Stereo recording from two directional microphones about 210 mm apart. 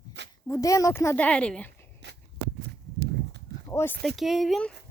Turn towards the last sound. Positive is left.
turn(degrees=0)  # may be behind; listen again after turning